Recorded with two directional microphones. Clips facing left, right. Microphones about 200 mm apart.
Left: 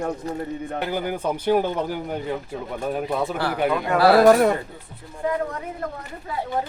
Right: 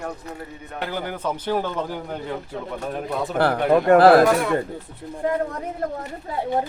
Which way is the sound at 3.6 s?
50° right (ahead or behind).